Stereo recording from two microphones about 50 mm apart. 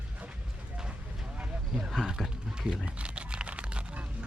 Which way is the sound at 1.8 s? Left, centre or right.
Centre.